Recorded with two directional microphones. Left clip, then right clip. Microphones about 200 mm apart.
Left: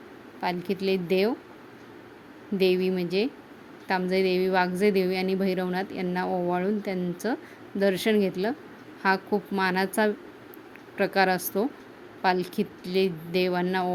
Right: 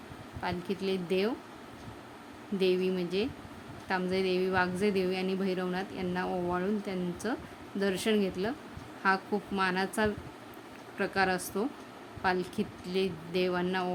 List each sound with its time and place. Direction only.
0.4 s a woman's voice: 25° left (ahead or behind)
2.6 s a woman's voice: 25° left (ahead or behind)